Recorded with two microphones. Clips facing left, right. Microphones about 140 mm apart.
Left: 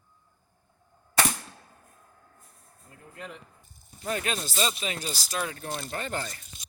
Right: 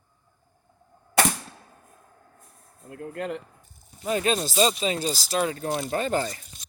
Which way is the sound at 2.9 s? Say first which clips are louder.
Right 12 dB; 70° right (ahead or behind).